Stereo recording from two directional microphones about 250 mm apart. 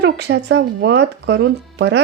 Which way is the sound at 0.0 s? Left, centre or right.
Right.